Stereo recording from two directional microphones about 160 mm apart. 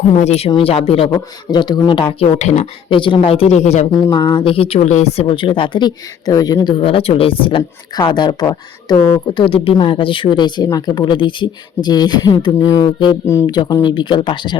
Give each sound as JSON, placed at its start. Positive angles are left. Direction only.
{"t": 0.2, "sound": "speech", "side_deg": 40}
{"t": 2.4, "sound": "speech", "side_deg": 45}
{"t": 2.9, "sound": "speech", "side_deg": 30}
{"t": 3.9, "sound": "speech", "side_deg": 20}